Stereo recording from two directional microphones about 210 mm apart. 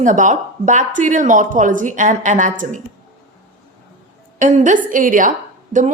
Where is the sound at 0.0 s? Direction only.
35° right (ahead or behind).